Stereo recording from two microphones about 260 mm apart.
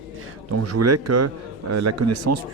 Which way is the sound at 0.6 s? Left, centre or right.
Right.